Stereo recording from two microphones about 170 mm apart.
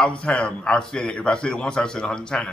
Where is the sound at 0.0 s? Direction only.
5° left (ahead or behind).